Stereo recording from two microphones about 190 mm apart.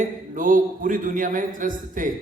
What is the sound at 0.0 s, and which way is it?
A man's voice, 45° right (ahead or behind).